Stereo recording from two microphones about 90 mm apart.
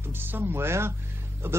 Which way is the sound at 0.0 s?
25° right (ahead or behind).